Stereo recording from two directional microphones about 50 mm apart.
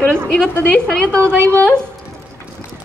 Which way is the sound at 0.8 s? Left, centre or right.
Centre.